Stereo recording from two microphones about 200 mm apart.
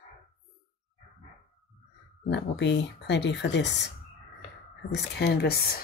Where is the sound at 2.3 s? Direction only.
60° left (ahead or behind).